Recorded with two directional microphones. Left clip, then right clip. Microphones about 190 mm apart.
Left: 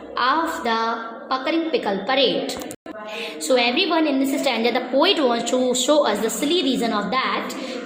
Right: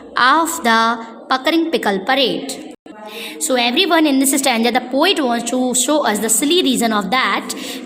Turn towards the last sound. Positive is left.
turn(degrees=-40)  # may be behind; listen again after turning